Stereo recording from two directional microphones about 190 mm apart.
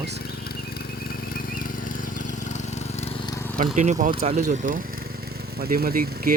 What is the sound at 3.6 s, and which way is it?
Speech, 40° right (ahead or behind).